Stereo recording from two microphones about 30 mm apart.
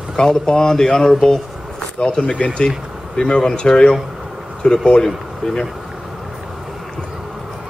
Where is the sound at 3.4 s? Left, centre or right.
Left.